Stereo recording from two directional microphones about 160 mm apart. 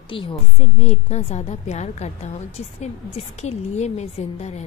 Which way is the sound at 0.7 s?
45° left (ahead or behind).